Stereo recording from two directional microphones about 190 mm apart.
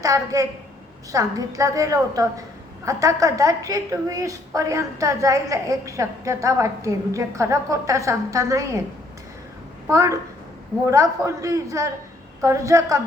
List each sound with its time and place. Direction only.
0.0 s a woman's voice: 15° right (ahead or behind)
9.9 s a woman's voice: 15° right (ahead or behind)